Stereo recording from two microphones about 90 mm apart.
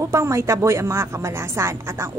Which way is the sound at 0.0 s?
30° right (ahead or behind).